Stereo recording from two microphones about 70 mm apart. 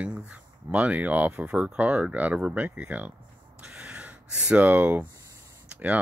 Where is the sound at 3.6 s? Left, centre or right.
Centre.